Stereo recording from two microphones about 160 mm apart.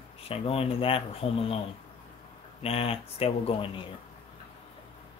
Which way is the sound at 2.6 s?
35° left (ahead or behind).